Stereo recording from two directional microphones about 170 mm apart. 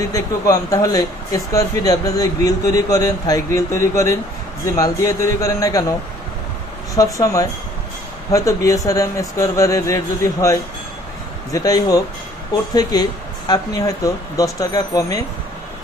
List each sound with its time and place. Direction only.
0.1 s speech: 20° left (ahead or behind)
6.9 s speech: 20° left (ahead or behind)
11.5 s speech: 20° left (ahead or behind)